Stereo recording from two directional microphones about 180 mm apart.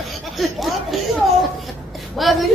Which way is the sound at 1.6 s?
Centre (ahead or behind).